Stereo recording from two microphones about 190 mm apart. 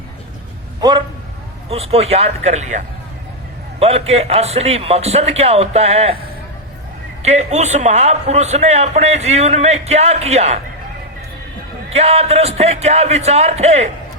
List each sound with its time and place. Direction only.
1.7 s a man's voice: 30° right (ahead or behind)
7.2 s a man's voice: 35° right (ahead or behind)
11.9 s a man's voice: 35° right (ahead or behind)